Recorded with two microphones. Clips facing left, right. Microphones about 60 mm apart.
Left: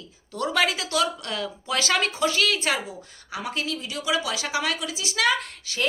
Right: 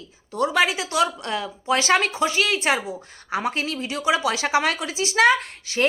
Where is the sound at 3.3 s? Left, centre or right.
Right.